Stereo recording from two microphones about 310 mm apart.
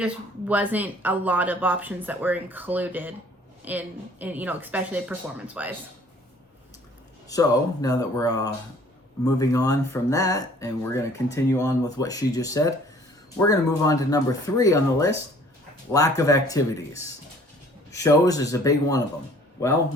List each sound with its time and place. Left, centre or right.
0.0 s speech: centre
7.3 s speech: centre